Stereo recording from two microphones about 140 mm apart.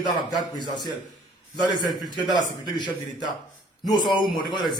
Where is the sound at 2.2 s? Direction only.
30° left (ahead or behind).